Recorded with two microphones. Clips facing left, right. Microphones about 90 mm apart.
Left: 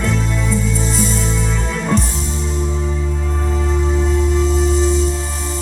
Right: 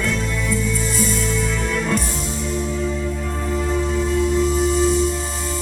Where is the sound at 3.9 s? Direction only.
25° left (ahead or behind).